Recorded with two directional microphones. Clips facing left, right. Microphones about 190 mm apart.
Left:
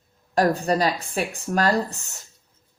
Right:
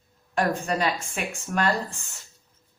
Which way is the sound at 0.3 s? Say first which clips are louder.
Left 5 dB; 35° left (ahead or behind).